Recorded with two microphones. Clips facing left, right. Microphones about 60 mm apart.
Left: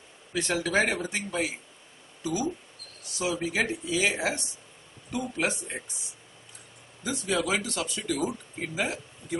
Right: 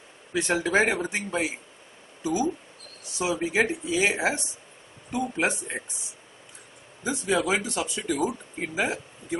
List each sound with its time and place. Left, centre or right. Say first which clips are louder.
0.3 s speech: right 3 dB; right
7.0 s speech: right 3 dB; right